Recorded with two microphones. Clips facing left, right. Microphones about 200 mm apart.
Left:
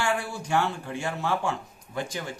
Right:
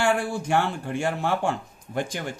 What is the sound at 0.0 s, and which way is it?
Speech, 50° right (ahead or behind).